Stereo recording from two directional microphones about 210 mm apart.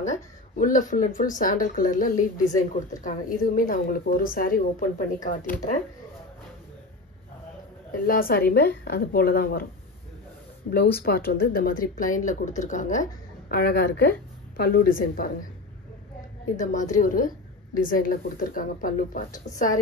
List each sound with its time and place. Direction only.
0.0 s speech: 35° left (ahead or behind)
8.1 s speech: 45° left (ahead or behind)
10.7 s speech: 50° left (ahead or behind)
16.5 s speech: 35° left (ahead or behind)